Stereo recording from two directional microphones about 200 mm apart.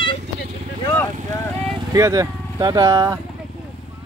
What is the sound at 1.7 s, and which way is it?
Speech, 15° right (ahead or behind).